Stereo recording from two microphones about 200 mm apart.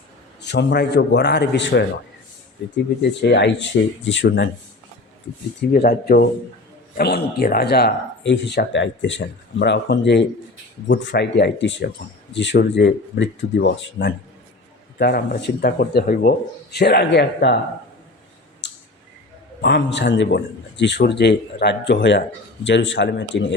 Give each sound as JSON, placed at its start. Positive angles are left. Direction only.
{"t": 0.4, "sound": "speech", "side_deg": 55}
{"t": 3.0, "sound": "speech", "side_deg": 60}
{"t": 5.7, "sound": "speech", "side_deg": 50}
{"t": 14.9, "sound": "speech", "side_deg": 50}
{"t": 18.6, "sound": "tick", "side_deg": 60}
{"t": 19.6, "sound": "speech", "side_deg": 60}